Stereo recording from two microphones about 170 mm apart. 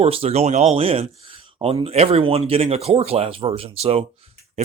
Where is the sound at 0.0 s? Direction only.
35° right (ahead or behind).